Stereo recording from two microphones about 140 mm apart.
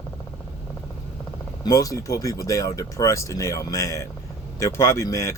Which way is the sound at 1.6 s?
25° left (ahead or behind).